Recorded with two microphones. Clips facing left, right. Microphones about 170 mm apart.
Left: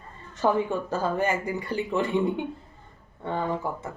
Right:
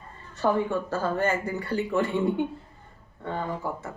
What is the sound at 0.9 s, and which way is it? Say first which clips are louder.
Speech: even; 15° left (ahead or behind).